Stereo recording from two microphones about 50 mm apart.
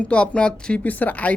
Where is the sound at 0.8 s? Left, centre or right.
Left.